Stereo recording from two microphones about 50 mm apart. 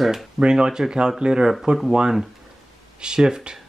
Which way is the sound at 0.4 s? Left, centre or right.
Centre.